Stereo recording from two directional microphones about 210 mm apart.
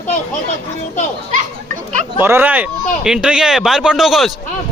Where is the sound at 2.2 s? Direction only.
10° right (ahead or behind).